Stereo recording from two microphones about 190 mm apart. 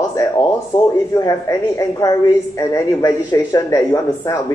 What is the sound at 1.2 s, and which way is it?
A woman's voice, 20° left (ahead or behind).